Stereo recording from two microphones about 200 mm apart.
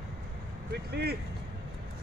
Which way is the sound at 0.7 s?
55° right (ahead or behind).